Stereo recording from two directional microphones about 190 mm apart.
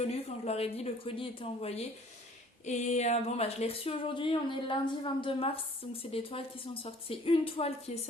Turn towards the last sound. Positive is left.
turn(degrees=35)  # may be behind; listen again after turning